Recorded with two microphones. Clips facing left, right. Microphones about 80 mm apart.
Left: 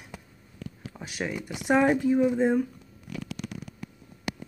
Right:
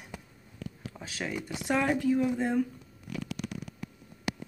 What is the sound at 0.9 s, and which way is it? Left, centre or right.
Speech, centre.